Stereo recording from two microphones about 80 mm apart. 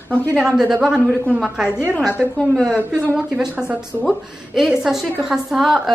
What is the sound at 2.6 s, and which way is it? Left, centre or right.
A woman's voice, centre.